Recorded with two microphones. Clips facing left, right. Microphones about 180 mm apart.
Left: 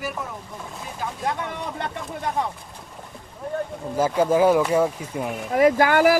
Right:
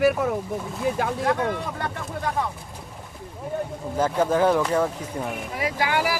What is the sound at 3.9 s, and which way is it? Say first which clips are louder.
Speech: left 2 dB; 10° left (ahead or behind).